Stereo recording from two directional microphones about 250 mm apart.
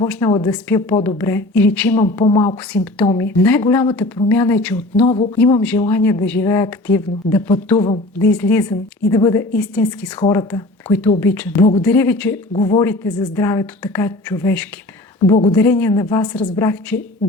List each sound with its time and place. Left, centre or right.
0.0 s speech: centre
2.2 s a woman's voice: centre
5.0 s a woman's voice: left
5.4 s speech: centre